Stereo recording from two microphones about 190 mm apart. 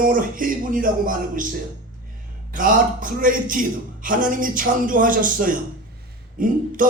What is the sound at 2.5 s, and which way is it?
A man's voice, 45° right (ahead or behind).